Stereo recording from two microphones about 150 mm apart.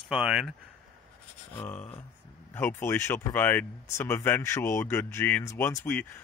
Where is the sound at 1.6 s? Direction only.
10° left (ahead or behind).